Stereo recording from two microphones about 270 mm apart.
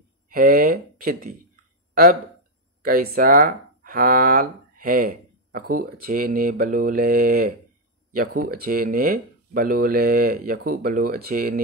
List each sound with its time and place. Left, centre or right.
0.3 s speech: right
2.8 s speech: right